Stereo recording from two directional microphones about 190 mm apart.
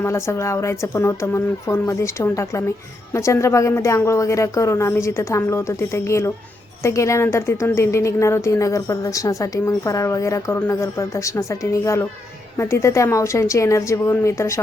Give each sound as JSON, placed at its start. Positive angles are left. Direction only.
{"t": 0.0, "sound": "speech", "side_deg": 15}